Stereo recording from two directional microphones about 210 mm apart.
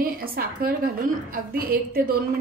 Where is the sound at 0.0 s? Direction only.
45° right (ahead or behind).